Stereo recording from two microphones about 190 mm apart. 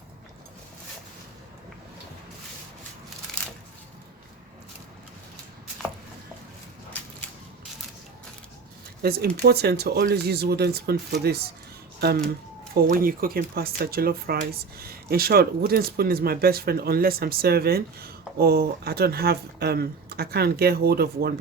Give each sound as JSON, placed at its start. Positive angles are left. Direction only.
{"t": 9.0, "sound": "speech", "side_deg": -55}